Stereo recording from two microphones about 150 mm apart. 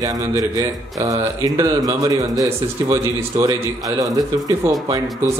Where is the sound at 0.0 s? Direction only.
25° right (ahead or behind).